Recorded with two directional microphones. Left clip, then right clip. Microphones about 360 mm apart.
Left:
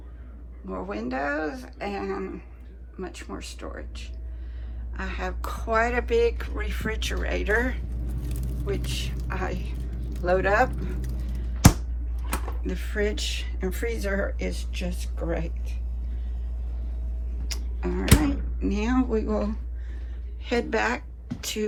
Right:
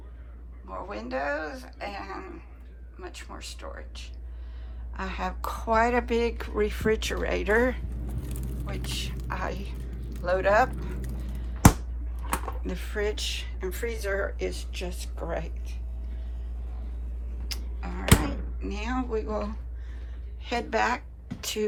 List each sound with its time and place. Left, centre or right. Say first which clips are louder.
0.7 s speech: left 2 dB; centre
12.3 s speech: right 1 dB; centre
17.5 s a sound: left 6 dB; centre
18.2 s a woman's voice: left 6 dB; centre